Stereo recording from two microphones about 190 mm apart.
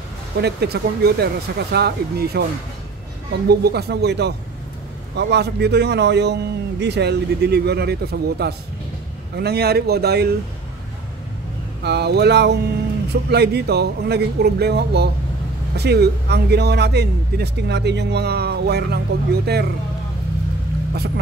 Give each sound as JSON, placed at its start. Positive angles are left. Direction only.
{"t": 0.4, "sound": "a man's voice", "side_deg": -60}
{"t": 3.4, "sound": "a man's voice", "side_deg": -55}
{"t": 11.8, "sound": "a man's voice", "side_deg": -60}